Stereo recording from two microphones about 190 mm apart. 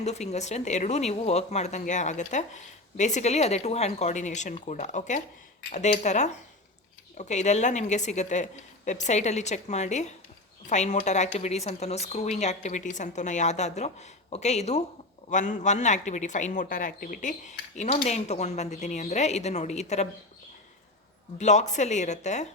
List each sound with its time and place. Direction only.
0.0 s speech: 35° left (ahead or behind)
21.3 s speech: 40° left (ahead or behind)